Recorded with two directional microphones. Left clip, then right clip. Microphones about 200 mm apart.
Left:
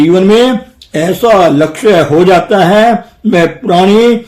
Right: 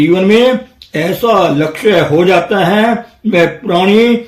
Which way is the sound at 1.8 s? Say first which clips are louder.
Left 2 dB; 45° left (ahead or behind).